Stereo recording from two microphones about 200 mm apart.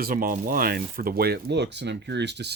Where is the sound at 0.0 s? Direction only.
45° right (ahead or behind).